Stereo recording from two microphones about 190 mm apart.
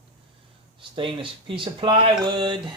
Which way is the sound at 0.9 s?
25° right (ahead or behind).